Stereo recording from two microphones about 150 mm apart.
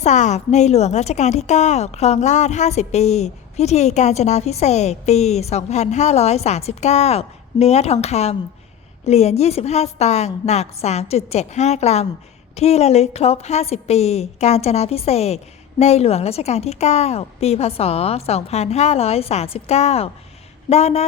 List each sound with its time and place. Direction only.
0.0 s a woman's voice: 50° left (ahead or behind)